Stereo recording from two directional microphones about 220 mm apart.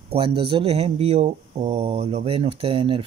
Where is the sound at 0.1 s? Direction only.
25° right (ahead or behind).